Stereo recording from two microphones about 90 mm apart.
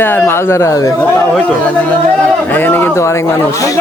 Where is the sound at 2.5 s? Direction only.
20° left (ahead or behind).